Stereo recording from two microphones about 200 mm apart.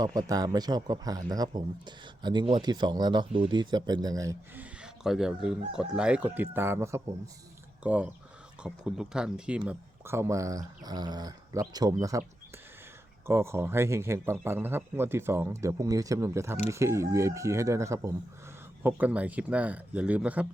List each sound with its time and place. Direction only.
0.0 s speech: 20° right (ahead or behind)
4.8 s speech: centre (ahead or behind)
13.2 s speech: 15° right (ahead or behind)